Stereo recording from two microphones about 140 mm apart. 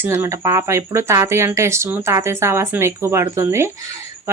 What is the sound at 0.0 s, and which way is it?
Speech, 15° right (ahead or behind).